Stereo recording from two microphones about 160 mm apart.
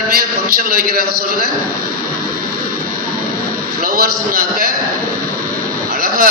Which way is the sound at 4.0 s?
70° right (ahead or behind).